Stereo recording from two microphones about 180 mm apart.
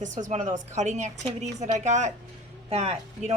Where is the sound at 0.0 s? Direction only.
45° right (ahead or behind).